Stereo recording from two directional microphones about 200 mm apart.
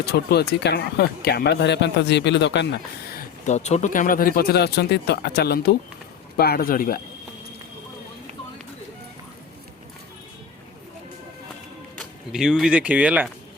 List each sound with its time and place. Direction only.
0.0 s speech: 50° left (ahead or behind)
11.9 s speech: centre (ahead or behind)